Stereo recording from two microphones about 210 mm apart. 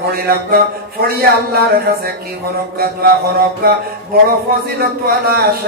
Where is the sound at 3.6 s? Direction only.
45° right (ahead or behind).